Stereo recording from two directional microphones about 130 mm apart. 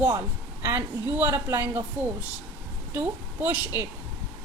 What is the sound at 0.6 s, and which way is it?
A woman's voice, 20° right (ahead or behind).